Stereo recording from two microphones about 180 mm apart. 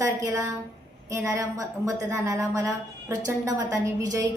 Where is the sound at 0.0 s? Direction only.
15° right (ahead or behind).